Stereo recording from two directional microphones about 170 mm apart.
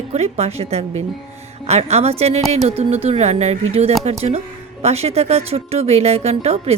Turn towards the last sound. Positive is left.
turn(degrees=-35)  # may be behind; listen again after turning